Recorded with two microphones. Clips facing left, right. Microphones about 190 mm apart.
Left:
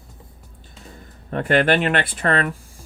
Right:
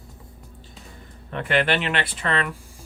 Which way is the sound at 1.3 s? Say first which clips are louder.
Left 5 dB; 45° left (ahead or behind).